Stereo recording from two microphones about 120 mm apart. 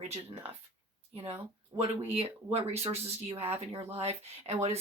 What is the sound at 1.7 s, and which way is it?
Speech, 60° right (ahead or behind).